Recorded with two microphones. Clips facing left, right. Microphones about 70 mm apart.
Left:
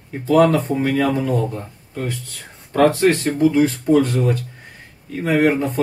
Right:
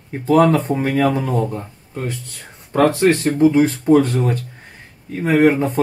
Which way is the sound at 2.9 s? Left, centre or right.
Right.